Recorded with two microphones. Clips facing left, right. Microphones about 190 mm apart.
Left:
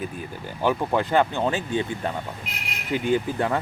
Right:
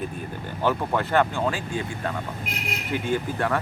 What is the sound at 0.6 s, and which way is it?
Speech, 15° left (ahead or behind).